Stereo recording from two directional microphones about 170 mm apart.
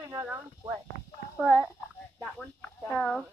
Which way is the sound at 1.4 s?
5° right (ahead or behind).